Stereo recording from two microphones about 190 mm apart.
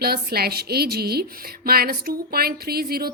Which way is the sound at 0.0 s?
55° right (ahead or behind).